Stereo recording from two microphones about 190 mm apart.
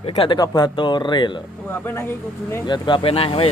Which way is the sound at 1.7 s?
15° left (ahead or behind).